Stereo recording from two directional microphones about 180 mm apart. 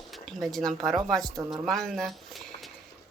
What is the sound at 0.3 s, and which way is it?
A woman's voice, centre (ahead or behind).